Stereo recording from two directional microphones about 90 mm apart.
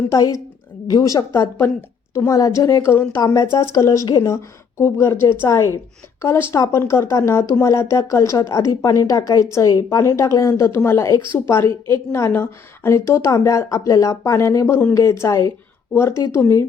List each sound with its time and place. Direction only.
0.1 s a woman's voice: 40° left (ahead or behind)
1.3 s a woman's voice: 25° left (ahead or behind)
2.1 s a woman's voice: 35° left (ahead or behind)